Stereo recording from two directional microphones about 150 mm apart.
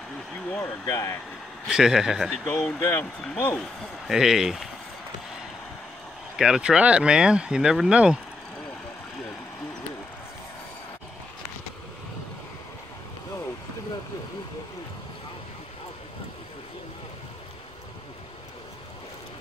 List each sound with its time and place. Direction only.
0.8 s speech: 20° left (ahead or behind)
1.7 s speech: 5° right (ahead or behind)
2.4 s speech: 10° left (ahead or behind)
4.1 s speech: 5° right (ahead or behind)
6.3 s speech: 5° right (ahead or behind)